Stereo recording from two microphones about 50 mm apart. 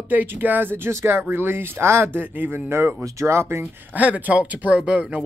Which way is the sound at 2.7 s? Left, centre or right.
Right.